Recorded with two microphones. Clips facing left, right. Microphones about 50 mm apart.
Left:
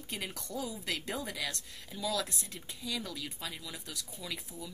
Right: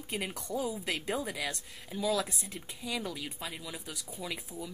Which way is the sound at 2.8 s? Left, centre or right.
Right.